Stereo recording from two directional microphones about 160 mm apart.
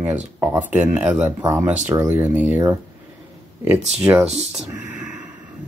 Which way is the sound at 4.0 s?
5° right (ahead or behind).